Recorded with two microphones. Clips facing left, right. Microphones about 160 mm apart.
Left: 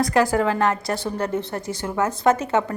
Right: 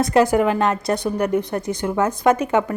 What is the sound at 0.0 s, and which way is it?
A woman's voice, 20° right (ahead or behind).